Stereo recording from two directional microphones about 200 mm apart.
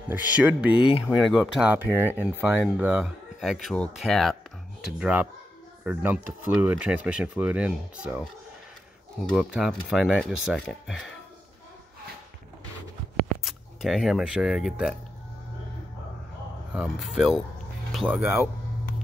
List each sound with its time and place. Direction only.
0.1 s speech: 5° right (ahead or behind)
13.4 s speech: centre (ahead or behind)
16.7 s speech: 5° right (ahead or behind)